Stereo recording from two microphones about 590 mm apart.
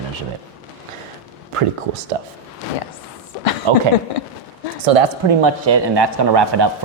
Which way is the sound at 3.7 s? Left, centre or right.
Right.